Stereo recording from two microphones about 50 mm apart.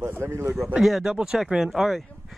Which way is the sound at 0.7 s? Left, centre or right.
Centre.